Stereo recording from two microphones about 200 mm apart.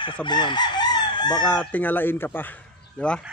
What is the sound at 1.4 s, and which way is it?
Speech, 5° left (ahead or behind).